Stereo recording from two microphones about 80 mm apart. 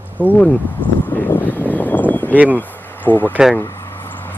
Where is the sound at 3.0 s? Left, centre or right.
Left.